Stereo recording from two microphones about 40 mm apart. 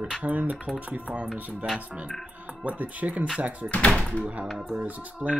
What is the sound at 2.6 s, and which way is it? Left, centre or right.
Speech, right.